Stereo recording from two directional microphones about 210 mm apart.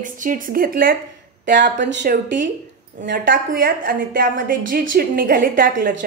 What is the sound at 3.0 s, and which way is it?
A woman's voice, 45° right (ahead or behind).